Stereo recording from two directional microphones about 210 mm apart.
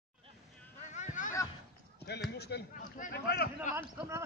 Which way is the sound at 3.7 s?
10° right (ahead or behind).